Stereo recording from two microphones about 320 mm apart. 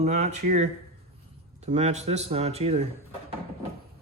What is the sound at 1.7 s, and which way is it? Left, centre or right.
Speech, centre.